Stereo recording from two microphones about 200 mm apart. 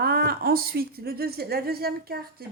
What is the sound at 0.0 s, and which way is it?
A woman's voice, 50° right (ahead or behind).